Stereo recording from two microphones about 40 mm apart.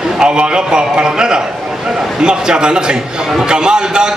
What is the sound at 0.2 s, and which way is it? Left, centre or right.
A man's voice, centre.